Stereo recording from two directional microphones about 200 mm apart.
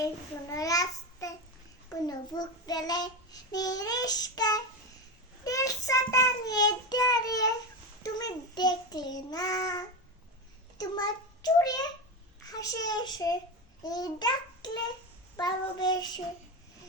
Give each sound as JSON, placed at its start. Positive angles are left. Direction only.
{"t": 0.5, "sound": "a child's voice", "side_deg": 15}
{"t": 2.0, "sound": "child singing", "side_deg": 20}
{"t": 10.8, "sound": "a child's voice", "side_deg": 20}
{"t": 12.5, "sound": "child singing", "side_deg": 15}